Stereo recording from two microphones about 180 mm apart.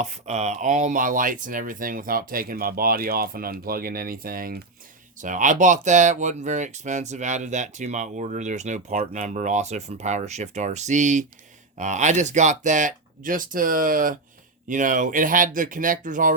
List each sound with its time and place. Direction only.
0.0 s speech: 40° right (ahead or behind)